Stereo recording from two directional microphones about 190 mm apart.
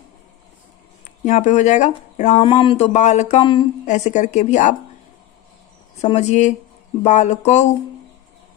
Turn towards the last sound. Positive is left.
turn(degrees=35)  # may be behind; listen again after turning